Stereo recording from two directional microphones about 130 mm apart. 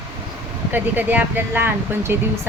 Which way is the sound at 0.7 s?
15° right (ahead or behind).